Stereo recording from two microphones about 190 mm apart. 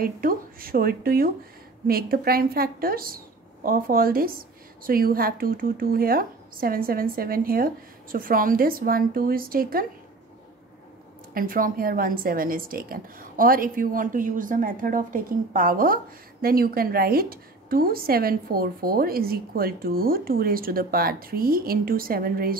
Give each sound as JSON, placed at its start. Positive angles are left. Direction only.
{"t": 0.0, "sound": "a woman's voice", "side_deg": -50}
{"t": 11.3, "sound": "a woman's voice", "side_deg": -50}